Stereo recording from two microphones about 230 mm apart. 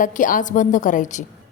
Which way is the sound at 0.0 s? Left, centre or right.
Left.